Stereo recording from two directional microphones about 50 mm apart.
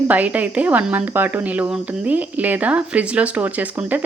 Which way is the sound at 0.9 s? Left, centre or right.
Right.